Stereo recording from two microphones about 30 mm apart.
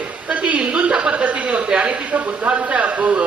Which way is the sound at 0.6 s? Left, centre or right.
Right.